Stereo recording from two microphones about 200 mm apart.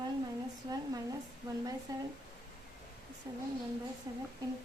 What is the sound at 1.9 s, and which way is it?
Speech, 20° right (ahead or behind).